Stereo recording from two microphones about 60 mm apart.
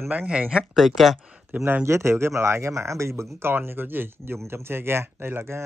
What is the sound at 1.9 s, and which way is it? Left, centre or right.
Speech, right.